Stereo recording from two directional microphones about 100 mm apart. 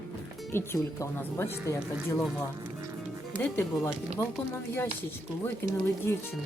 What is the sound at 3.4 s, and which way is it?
Speech, 20° left (ahead or behind).